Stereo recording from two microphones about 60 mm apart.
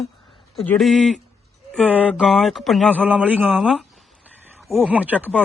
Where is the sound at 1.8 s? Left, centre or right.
Right.